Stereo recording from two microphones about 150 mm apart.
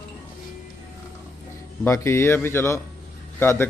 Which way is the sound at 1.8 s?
20° left (ahead or behind).